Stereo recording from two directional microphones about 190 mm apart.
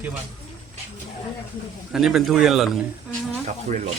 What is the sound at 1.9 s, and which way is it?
Speech, centre (ahead or behind).